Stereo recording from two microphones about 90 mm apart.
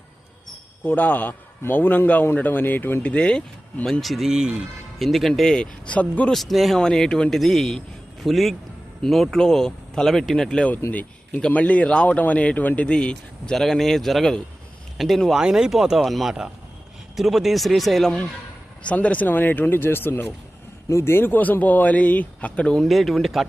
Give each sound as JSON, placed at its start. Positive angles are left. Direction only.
{"t": 0.9, "sound": "a man's voice", "side_deg": 20}
{"t": 4.0, "sound": "speech", "side_deg": 0}
{"t": 6.3, "sound": "a man's voice", "side_deg": 0}